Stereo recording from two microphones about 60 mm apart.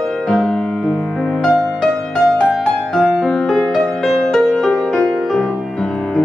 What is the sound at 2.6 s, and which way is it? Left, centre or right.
Music, centre.